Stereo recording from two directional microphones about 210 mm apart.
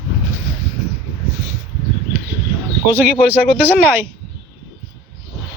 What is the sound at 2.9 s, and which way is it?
Speech, 5° right (ahead or behind).